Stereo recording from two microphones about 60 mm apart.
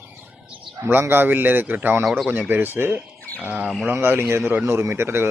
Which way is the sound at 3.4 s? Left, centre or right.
Right.